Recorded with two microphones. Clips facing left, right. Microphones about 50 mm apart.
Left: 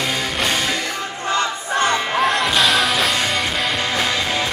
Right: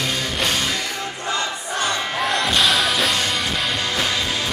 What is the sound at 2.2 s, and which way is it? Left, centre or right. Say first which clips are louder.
Music: left 2 dB; centre.